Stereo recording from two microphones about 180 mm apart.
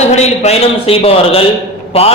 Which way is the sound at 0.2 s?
35° left (ahead or behind).